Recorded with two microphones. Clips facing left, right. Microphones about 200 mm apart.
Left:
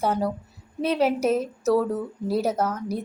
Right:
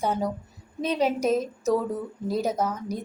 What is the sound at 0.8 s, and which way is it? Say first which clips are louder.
Speech: left 2 dB; 10° left (ahead or behind).